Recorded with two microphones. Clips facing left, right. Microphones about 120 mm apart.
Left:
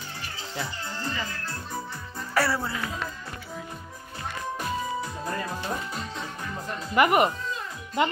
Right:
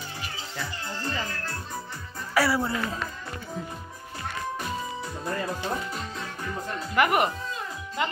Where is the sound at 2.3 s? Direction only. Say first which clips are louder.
Right 2 dB; 5° right (ahead or behind).